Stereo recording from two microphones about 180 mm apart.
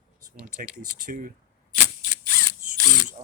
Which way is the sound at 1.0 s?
50° right (ahead or behind).